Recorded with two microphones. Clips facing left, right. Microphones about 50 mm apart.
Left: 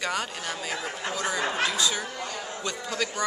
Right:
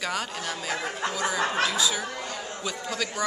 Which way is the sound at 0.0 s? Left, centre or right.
Centre.